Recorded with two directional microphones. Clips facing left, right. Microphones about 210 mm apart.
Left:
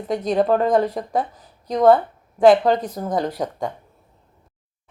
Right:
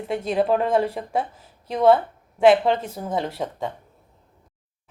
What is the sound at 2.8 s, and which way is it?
Speech, 10° right (ahead or behind).